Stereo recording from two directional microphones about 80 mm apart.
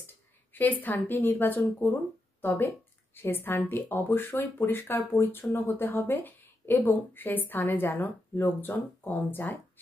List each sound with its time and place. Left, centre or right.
0.0 s a woman's voice: left